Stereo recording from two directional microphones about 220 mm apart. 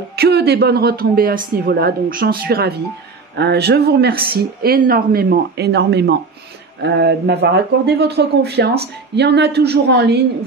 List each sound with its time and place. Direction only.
0.1 s speech: 45° right (ahead or behind)